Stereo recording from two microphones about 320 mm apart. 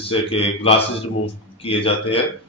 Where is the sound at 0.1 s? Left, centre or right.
Centre.